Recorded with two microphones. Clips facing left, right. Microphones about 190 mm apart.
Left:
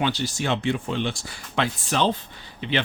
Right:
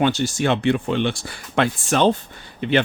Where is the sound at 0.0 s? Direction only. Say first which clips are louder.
Right 6 dB; 50° right (ahead or behind).